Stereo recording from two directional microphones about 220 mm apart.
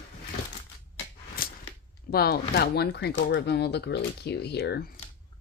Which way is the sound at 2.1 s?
45° left (ahead or behind).